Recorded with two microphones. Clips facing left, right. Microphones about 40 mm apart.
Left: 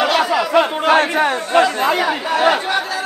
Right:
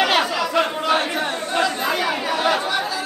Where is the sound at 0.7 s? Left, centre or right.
Left.